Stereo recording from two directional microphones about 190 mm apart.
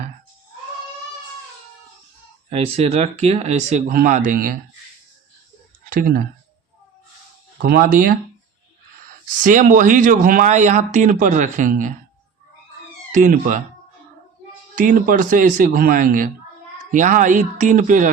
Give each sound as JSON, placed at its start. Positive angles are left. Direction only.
{"t": 2.5, "sound": "speech", "side_deg": -35}
{"t": 5.9, "sound": "speech", "side_deg": -50}
{"t": 7.6, "sound": "speech", "side_deg": -50}
{"t": 9.4, "sound": "speech", "side_deg": -45}
{"t": 13.1, "sound": "speech", "side_deg": -40}
{"t": 14.8, "sound": "speech", "side_deg": -45}